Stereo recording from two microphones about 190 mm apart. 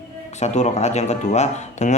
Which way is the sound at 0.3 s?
35° left (ahead or behind).